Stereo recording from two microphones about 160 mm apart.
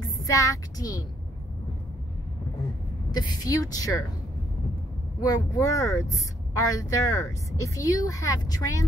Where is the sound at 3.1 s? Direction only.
25° left (ahead or behind).